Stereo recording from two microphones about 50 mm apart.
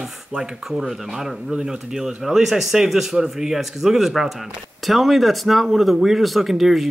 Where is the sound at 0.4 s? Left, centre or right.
Centre.